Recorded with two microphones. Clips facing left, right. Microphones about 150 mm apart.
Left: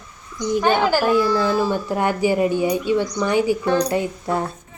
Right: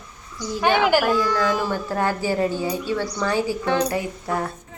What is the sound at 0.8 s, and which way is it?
Speech, 10° right (ahead or behind).